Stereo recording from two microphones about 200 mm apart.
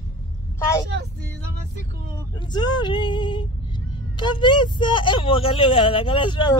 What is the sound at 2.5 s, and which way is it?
Speech, 20° left (ahead or behind).